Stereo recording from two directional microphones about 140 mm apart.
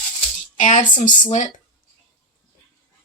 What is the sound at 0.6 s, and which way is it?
Speech, 65° left (ahead or behind).